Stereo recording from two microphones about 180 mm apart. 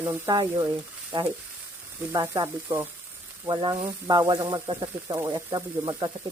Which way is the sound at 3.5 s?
25° right (ahead or behind).